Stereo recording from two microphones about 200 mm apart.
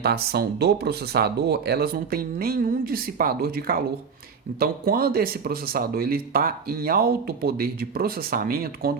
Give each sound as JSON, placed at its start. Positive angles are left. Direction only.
{"t": 0.0, "sound": "speech", "side_deg": -55}